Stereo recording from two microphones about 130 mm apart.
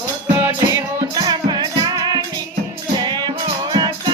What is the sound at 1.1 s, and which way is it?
Music, 30° right (ahead or behind).